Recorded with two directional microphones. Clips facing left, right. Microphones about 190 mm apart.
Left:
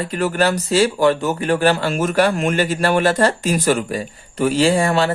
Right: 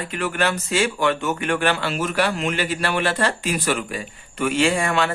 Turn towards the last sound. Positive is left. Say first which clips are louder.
# left 4 dB
turn(degrees=35)  # may be behind; listen again after turning